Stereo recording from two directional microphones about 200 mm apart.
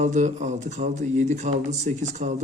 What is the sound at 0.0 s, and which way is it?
A man's voice, 35° right (ahead or behind).